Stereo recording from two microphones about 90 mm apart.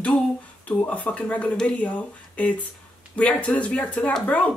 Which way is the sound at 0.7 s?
15° left (ahead or behind).